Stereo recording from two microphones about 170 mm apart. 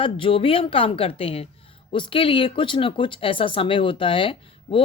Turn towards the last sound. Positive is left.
turn(degrees=30)  # may be behind; listen again after turning